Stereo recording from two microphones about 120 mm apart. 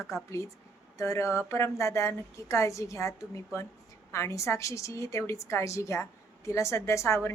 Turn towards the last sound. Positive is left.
turn(degrees=20)  # may be behind; listen again after turning